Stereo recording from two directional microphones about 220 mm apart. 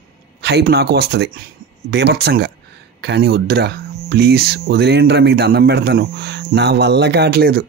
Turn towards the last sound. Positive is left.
turn(degrees=-45)  # may be behind; listen again after turning